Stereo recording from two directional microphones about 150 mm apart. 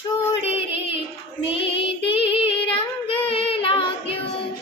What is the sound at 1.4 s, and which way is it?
Child singing, 40° left (ahead or behind).